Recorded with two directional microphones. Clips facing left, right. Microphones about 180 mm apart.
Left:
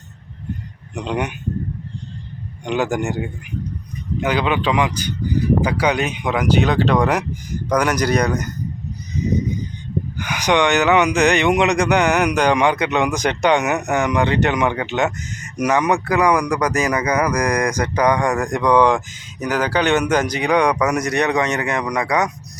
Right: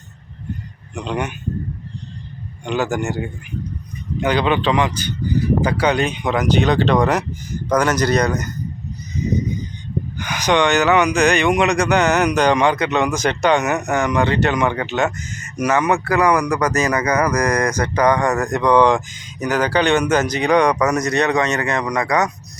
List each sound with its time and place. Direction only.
0.9 s speech: 15° left (ahead or behind)
2.6 s speech: 15° left (ahead or behind)
10.2 s speech: 10° left (ahead or behind)